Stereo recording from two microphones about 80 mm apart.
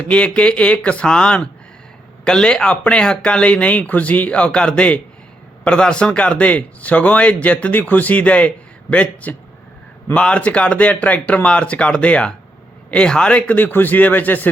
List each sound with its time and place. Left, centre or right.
0.0 s a man's voice: centre